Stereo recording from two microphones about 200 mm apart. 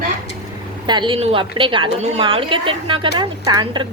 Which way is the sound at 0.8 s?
20° right (ahead or behind).